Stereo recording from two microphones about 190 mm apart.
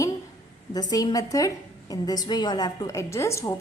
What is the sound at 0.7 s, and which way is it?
A woman's voice, 20° left (ahead or behind).